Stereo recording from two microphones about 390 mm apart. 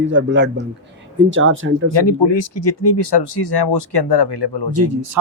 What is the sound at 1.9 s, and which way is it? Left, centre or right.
Speech, left.